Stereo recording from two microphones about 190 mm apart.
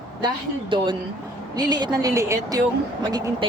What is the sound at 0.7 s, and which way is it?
Speech, 25° right (ahead or behind).